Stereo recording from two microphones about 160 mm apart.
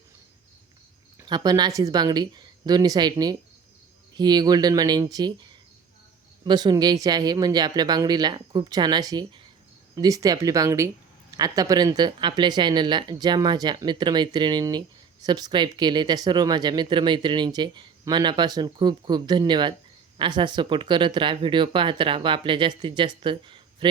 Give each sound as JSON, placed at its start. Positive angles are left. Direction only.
{"t": 1.2, "sound": "speech", "side_deg": -25}